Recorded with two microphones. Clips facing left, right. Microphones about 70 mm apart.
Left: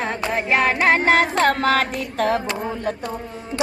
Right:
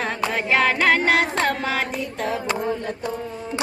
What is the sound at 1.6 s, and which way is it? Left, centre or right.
Music, left.